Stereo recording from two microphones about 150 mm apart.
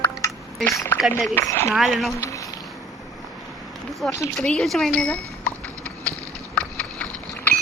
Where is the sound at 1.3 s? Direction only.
15° left (ahead or behind).